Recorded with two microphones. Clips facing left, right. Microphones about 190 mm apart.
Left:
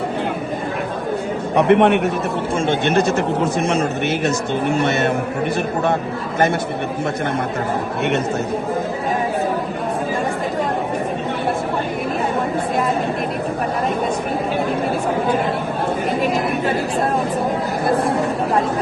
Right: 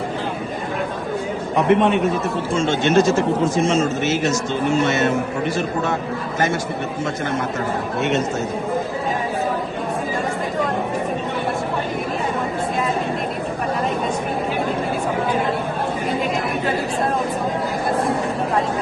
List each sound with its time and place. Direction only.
1.5 s speech: 65° left (ahead or behind)